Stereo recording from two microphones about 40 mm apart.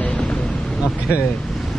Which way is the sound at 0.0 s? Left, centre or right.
Left.